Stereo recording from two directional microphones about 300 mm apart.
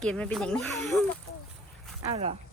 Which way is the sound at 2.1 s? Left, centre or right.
Centre.